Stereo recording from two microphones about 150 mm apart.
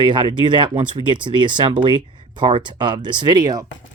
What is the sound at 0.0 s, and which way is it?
Speech, 30° right (ahead or behind).